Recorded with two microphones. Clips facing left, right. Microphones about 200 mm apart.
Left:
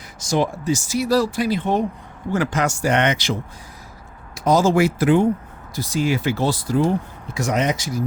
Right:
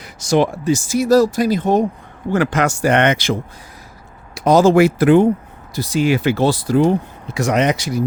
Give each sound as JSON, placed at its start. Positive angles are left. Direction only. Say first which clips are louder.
{"t": 0.0, "sound": "speech", "louder": "right 5 dB", "side_deg": -70}
{"t": 2.3, "sound": "speech", "louder": "right 4 dB", "side_deg": -65}
{"t": 4.4, "sound": "speech", "louder": "right 5 dB", "side_deg": -70}
{"t": 5.7, "sound": "speech", "louder": "right 5 dB", "side_deg": -70}